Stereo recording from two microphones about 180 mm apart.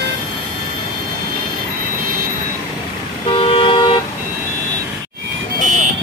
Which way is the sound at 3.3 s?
30° left (ahead or behind).